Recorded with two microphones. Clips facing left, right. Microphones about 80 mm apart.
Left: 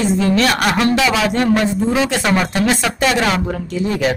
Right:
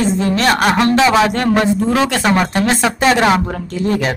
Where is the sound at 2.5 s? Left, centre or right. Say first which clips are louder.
Right 2 dB; right.